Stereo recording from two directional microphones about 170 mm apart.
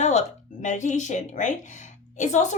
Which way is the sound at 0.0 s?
45° left (ahead or behind).